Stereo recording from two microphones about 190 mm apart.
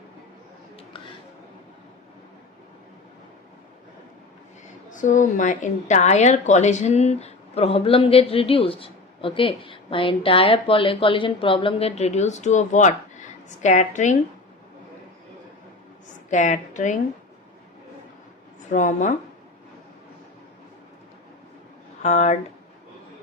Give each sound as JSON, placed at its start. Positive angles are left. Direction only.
{"t": 4.9, "sound": "a woman's voice", "side_deg": 40}
{"t": 16.3, "sound": "a woman's voice", "side_deg": 40}
{"t": 18.7, "sound": "a woman's voice", "side_deg": 40}
{"t": 22.0, "sound": "a woman's voice", "side_deg": 40}